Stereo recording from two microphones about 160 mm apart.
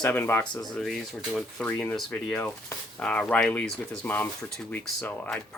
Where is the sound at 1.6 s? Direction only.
10° left (ahead or behind).